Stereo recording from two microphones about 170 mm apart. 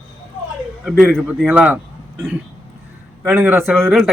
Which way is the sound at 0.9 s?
Centre (ahead or behind).